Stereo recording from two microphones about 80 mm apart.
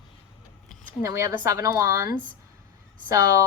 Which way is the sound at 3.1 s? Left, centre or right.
Right.